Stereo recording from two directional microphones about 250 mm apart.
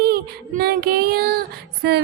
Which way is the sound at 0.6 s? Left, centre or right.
Right.